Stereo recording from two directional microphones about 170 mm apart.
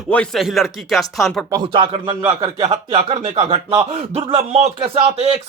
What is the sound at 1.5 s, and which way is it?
Speech, 30° right (ahead or behind).